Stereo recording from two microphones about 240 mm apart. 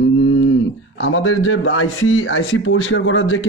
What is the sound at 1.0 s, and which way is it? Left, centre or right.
Speech, left.